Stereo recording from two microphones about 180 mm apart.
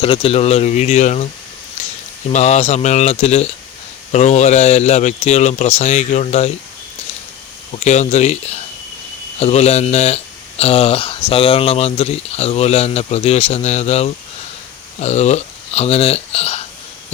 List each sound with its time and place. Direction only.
0.0 s speech: 30° left (ahead or behind)
1.8 s a sound: 40° left (ahead or behind)
2.3 s speech: 40° left (ahead or behind)
7.8 s speech: 40° left (ahead or behind)